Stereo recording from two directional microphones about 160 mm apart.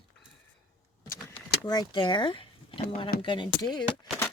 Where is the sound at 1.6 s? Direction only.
25° left (ahead or behind).